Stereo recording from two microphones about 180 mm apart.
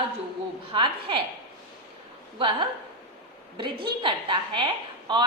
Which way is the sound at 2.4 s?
25° right (ahead or behind).